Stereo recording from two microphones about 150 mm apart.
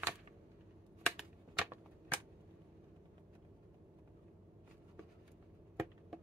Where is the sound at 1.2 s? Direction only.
5° right (ahead or behind).